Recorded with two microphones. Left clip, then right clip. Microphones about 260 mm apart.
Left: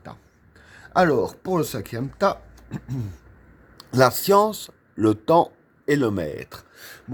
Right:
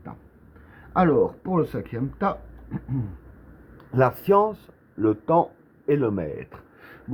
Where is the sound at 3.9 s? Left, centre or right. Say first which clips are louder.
Left 3 dB; left.